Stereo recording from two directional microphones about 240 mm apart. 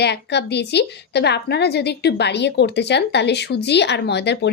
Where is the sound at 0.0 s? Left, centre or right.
Left.